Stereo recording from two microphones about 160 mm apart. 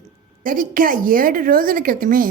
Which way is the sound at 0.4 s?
60° right (ahead or behind).